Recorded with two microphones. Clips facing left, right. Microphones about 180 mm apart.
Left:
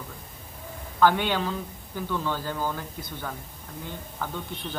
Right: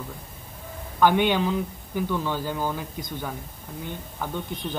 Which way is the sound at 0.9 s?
15° right (ahead or behind).